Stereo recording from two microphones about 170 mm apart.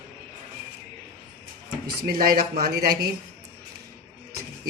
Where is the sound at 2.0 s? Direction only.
65° right (ahead or behind).